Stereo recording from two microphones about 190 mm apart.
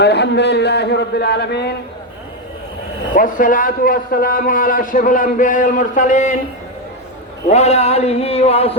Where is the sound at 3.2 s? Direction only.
45° left (ahead or behind).